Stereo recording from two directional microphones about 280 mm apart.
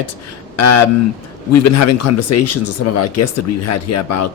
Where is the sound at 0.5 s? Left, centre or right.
Left.